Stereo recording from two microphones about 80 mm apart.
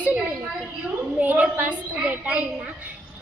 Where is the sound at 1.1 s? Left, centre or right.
Centre.